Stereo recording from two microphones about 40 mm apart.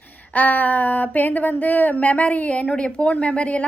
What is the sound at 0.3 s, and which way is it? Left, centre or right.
A woman's voice, left.